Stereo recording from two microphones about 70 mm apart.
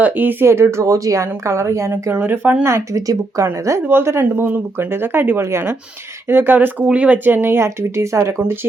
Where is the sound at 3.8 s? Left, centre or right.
Right.